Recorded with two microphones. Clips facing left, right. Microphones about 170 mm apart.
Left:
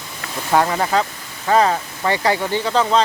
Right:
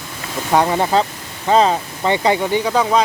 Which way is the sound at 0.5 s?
20° right (ahead or behind).